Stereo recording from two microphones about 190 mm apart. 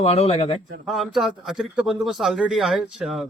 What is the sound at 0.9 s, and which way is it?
A man's voice, centre (ahead or behind).